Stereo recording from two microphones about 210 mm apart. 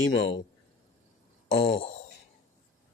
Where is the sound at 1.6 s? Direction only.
30° left (ahead or behind).